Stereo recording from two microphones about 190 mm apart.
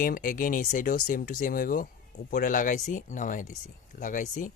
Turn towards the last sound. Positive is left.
turn(degrees=45)  # may be behind; listen again after turning